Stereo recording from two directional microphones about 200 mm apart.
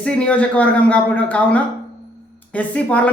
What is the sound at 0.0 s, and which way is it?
Speech, 5° left (ahead or behind).